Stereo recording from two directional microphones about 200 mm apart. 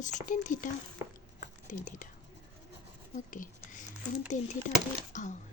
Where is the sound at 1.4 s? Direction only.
40° left (ahead or behind).